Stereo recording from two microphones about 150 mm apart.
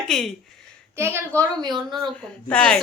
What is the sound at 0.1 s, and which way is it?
Speech, centre (ahead or behind).